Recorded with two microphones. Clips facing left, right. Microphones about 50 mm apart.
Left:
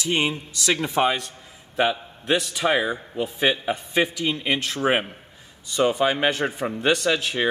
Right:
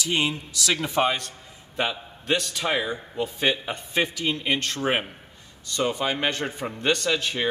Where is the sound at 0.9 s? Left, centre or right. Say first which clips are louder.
Left 2 dB; centre.